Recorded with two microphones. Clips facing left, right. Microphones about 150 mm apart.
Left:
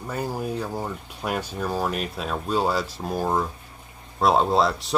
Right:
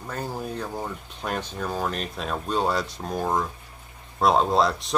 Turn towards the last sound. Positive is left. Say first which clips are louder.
# left 1 dB
turn(degrees=0)  # may be behind; listen again after turning